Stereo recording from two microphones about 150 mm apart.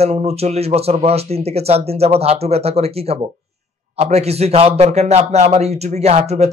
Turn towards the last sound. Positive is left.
turn(degrees=-45)  # may be behind; listen again after turning